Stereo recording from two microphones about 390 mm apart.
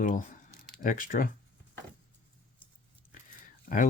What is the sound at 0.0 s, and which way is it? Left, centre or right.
Speech, centre.